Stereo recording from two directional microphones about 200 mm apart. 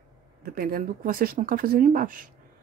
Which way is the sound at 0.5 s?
45° right (ahead or behind).